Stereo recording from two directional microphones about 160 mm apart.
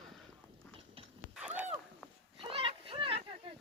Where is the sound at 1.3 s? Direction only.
10° right (ahead or behind).